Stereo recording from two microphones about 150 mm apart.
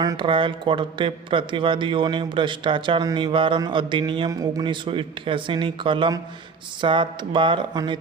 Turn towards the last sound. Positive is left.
turn(degrees=-30)  # may be behind; listen again after turning